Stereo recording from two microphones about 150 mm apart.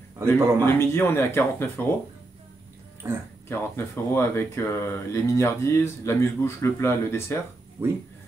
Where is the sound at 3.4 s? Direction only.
15° left (ahead or behind).